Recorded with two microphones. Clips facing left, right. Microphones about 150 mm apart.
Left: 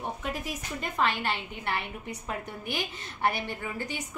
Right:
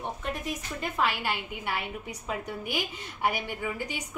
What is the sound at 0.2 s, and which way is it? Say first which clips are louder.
A woman's voice: right 1 dB; 5° left (ahead or behind).